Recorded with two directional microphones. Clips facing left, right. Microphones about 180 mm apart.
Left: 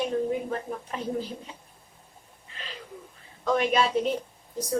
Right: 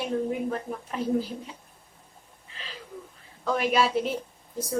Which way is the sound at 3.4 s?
5° right (ahead or behind).